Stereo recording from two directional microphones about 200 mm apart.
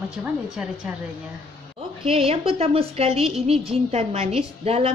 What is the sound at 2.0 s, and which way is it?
A woman's voice, 30° right (ahead or behind).